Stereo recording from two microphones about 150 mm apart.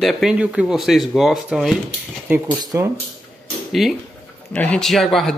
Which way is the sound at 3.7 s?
Centre (ahead or behind).